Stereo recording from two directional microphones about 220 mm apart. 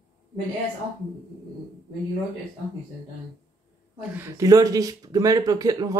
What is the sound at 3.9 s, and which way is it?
Speech, 10° right (ahead or behind).